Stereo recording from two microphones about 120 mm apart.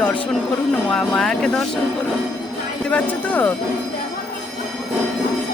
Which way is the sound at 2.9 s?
15° left (ahead or behind).